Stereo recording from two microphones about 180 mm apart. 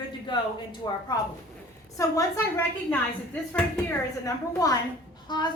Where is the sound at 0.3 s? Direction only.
25° left (ahead or behind).